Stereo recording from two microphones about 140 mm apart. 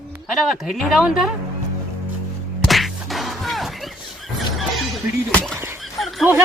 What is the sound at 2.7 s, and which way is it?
Whack, centre (ahead or behind).